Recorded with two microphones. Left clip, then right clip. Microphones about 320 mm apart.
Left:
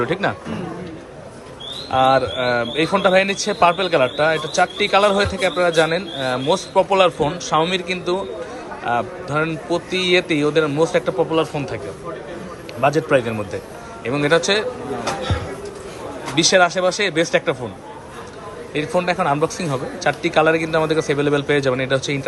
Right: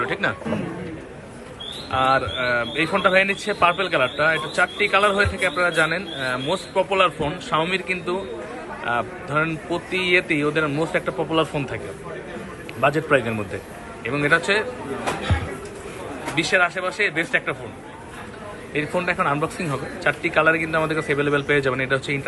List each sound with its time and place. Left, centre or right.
0.0 s a man's voice: centre
1.9 s a man's voice: centre
12.8 s a man's voice: centre
16.3 s a man's voice: centre
18.7 s a man's voice: centre